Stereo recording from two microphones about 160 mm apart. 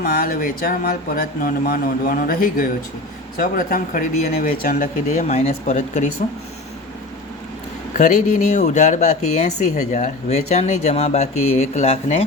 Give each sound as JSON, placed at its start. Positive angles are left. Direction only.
{"t": 0.0, "sound": "speech", "side_deg": 65}
{"t": 5.1, "sound": "speech", "side_deg": 45}
{"t": 7.9, "sound": "speech", "side_deg": 50}